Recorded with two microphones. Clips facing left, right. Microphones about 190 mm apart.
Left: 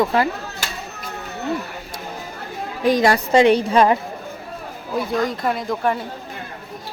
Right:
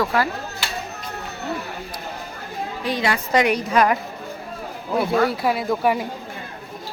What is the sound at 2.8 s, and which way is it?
Speech, 45° left (ahead or behind).